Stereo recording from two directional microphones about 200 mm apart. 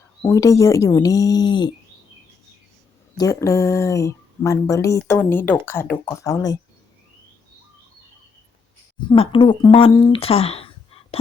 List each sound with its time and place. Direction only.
0.2 s speech: 15° left (ahead or behind)
3.2 s speech: 15° left (ahead or behind)
9.0 s speech: 25° left (ahead or behind)